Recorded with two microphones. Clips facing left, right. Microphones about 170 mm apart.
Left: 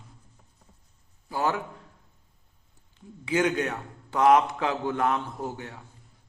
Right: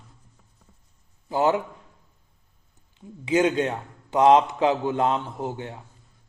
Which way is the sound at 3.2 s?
20° right (ahead or behind).